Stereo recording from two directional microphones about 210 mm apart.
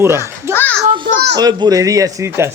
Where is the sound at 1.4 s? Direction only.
20° right (ahead or behind).